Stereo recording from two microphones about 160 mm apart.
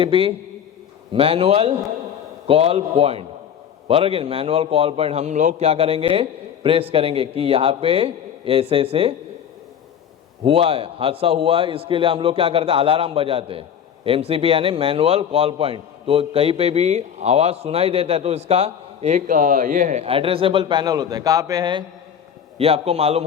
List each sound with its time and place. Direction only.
0.0 s a man's voice: 35° right (ahead or behind)
10.4 s a man's voice: 35° right (ahead or behind)
22.5 s a man's voice: 40° right (ahead or behind)